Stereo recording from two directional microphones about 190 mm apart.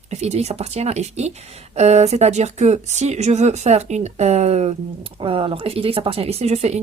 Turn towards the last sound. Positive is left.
turn(degrees=-35)  # may be behind; listen again after turning